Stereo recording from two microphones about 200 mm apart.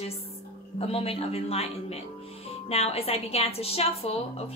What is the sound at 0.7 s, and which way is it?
A woman's voice, 30° left (ahead or behind).